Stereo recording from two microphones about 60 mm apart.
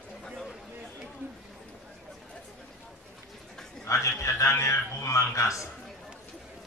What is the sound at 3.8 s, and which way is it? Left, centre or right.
A man's voice, left.